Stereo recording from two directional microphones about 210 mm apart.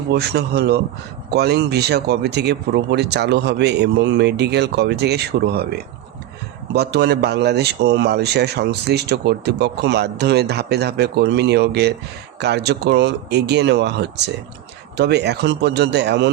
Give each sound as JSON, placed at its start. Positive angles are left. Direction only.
{"t": 0.1, "sound": "speech", "side_deg": -50}